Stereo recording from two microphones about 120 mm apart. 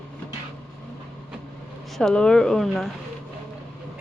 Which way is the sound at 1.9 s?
5° left (ahead or behind).